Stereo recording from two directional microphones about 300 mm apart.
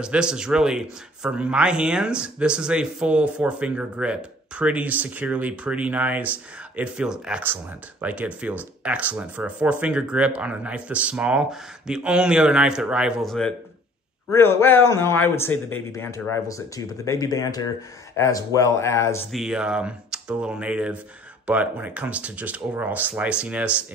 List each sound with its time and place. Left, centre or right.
0.0 s a man's voice: centre